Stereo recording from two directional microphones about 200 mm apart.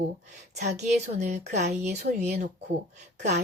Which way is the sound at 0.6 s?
35° right (ahead or behind).